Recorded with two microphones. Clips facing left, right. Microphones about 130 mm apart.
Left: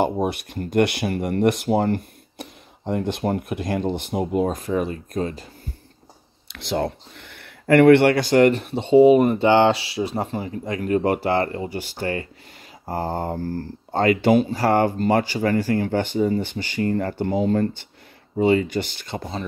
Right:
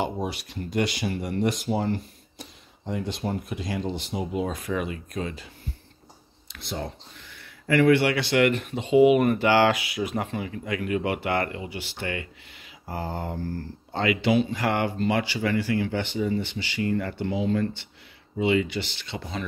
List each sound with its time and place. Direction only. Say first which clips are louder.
0.0 s speech: left 7 dB; 55° left (ahead or behind)
6.4 s speech: left 9 dB; 80° left; by 8.1 s 60° left (ahead or behind)
8.1 s speech: left 6 dB; 40° left (ahead or behind)